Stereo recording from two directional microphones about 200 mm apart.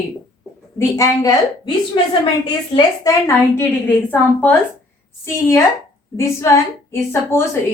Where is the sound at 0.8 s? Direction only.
15° left (ahead or behind).